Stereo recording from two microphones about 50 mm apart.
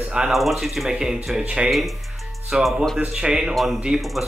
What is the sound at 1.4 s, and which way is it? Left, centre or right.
Speech, right.